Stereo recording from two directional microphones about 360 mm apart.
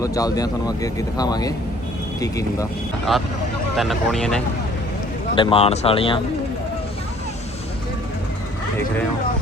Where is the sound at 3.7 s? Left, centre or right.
Centre.